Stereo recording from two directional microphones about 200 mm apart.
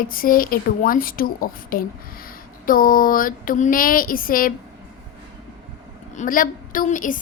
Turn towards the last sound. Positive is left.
turn(degrees=40)  # may be behind; listen again after turning